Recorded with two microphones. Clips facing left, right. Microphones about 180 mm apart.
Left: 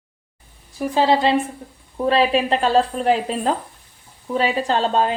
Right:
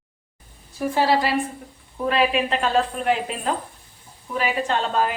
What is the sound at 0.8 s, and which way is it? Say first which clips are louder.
A woman's voice: left 3 dB; 20° left (ahead or behind).